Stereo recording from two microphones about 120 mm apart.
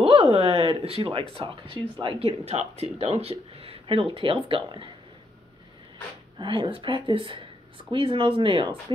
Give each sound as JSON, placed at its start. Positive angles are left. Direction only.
{"t": 0.0, "sound": "a sound", "side_deg": -50}
{"t": 1.3, "sound": "speech", "side_deg": -45}
{"t": 6.3, "sound": "speech", "side_deg": -45}